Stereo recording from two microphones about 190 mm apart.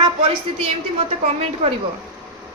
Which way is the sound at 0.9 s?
30° right (ahead or behind).